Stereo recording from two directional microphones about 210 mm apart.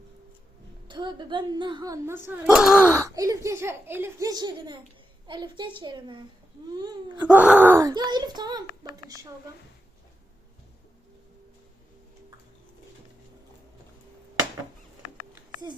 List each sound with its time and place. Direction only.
0.9 s speech: 20° right (ahead or behind); by 3.1 s 5° right (ahead or behind)
3.2 s a woman's voice: 15° right (ahead or behind)
7.2 s speech: 10° right (ahead or behind)